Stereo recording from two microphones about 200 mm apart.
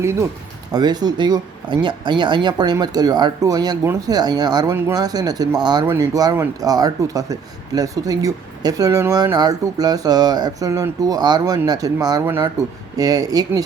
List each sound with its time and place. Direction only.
0.0 s speech: 15° right (ahead or behind)